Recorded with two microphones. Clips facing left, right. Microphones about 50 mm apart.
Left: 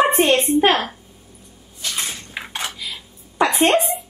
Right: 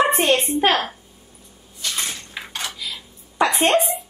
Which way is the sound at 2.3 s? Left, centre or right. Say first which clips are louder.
Left 4 dB; centre.